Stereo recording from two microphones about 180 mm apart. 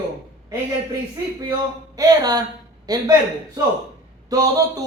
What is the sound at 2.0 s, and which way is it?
Speech, 20° right (ahead or behind).